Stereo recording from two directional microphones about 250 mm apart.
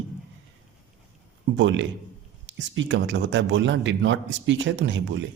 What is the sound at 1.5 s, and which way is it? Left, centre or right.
A man's voice, right.